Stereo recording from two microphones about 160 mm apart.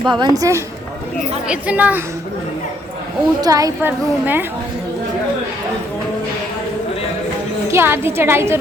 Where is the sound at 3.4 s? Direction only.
20° right (ahead or behind).